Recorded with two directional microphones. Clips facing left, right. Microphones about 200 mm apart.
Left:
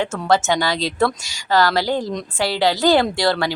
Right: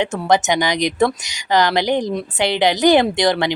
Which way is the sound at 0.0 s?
15° right (ahead or behind).